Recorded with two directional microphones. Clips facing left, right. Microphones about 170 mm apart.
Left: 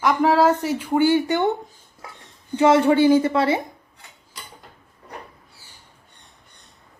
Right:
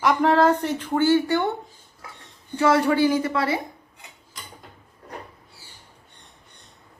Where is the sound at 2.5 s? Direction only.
20° left (ahead or behind).